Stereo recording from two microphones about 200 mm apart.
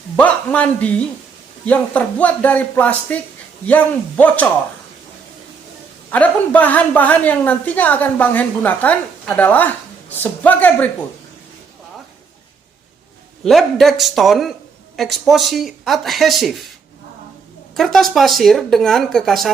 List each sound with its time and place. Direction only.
0.2 s a woman's voice: 5° left (ahead or behind)
6.1 s a woman's voice: 10° left (ahead or behind)
13.4 s speech: centre (ahead or behind)
17.7 s speech: centre (ahead or behind)